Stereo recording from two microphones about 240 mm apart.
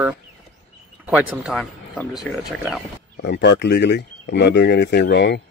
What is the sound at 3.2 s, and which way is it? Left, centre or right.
A man's voice, left.